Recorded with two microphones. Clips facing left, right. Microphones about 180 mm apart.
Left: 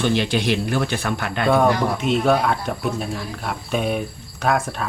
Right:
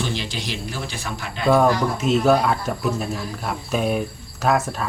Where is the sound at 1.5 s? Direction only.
Centre (ahead or behind).